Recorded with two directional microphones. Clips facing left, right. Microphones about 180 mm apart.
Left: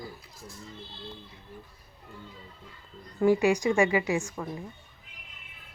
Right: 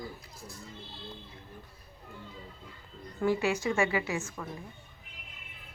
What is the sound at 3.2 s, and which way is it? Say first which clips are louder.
A woman's voice: left 6 dB; 15° left (ahead or behind).